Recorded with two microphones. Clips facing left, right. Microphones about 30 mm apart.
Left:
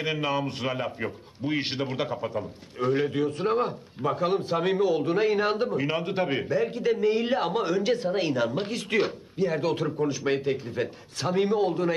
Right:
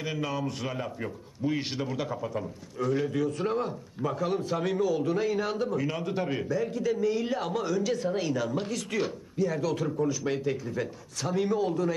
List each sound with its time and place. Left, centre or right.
0.0 s a man's voice: left